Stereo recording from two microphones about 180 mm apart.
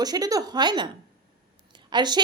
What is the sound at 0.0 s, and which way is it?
Speech, 20° right (ahead or behind).